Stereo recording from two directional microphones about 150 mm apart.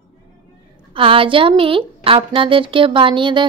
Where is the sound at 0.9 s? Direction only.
35° right (ahead or behind).